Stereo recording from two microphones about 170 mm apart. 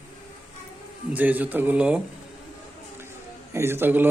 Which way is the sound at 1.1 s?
10° right (ahead or behind).